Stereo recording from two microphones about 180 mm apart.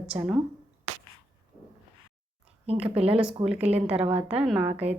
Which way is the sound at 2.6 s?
35° right (ahead or behind).